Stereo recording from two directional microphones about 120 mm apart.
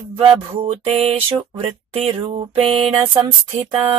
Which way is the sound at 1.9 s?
45° right (ahead or behind).